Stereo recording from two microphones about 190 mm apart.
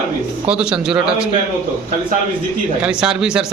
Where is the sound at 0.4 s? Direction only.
5° right (ahead or behind).